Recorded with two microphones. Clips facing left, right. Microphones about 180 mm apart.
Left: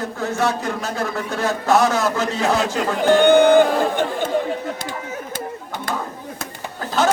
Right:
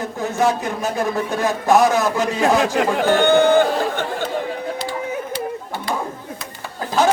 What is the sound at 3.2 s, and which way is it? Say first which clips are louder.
Speech: left 2 dB; 15° left (ahead or behind).